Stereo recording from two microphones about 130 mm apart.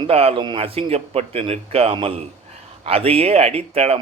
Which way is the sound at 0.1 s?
50° right (ahead or behind).